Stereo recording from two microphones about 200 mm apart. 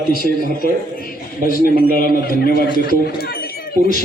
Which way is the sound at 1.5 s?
45° left (ahead or behind).